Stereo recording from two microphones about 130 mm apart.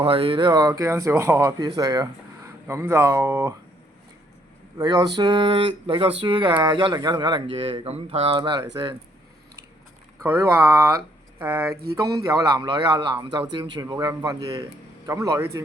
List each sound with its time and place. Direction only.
0.0 s speech: 45° right (ahead or behind)
0.7 s a man's voice: 20° right (ahead or behind)
1.5 s a man's voice: 30° right (ahead or behind)
4.8 s speech: 30° right (ahead or behind)
7.5 s speech: 45° right (ahead or behind)
10.2 s a man's voice: 20° right (ahead or behind); by 13.8 s 35° right (ahead or behind)
13.8 s a man's voice: 25° right (ahead or behind)